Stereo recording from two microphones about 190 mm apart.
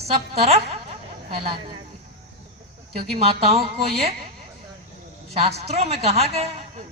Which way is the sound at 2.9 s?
30° right (ahead or behind).